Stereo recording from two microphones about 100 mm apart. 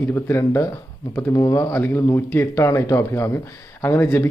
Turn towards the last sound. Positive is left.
turn(degrees=25)  # may be behind; listen again after turning